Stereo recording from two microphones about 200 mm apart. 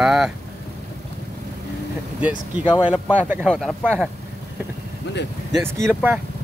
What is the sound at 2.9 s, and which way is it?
Speech, 10° right (ahead or behind).